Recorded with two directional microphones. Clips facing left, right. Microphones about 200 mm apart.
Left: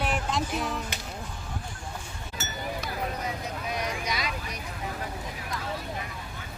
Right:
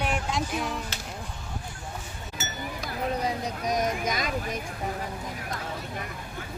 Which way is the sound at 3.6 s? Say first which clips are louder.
Right 7 dB; 45° right (ahead or behind).